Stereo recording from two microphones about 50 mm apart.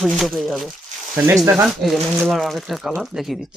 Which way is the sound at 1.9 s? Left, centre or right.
Centre.